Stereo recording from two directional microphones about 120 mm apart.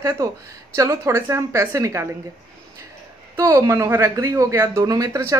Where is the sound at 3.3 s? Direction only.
20° right (ahead or behind).